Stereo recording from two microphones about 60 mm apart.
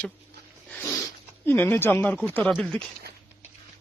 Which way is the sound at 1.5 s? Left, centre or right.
Left.